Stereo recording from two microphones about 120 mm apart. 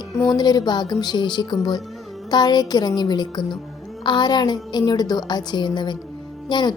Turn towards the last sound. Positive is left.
turn(degrees=40)  # may be behind; listen again after turning